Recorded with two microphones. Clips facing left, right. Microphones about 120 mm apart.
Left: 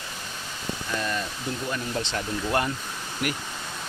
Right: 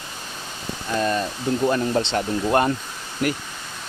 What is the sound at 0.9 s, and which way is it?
Speech, 40° right (ahead or behind).